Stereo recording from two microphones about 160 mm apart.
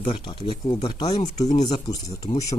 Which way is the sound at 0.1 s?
30° left (ahead or behind).